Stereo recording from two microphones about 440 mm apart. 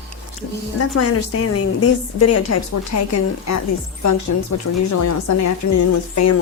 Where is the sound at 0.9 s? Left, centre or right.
Left.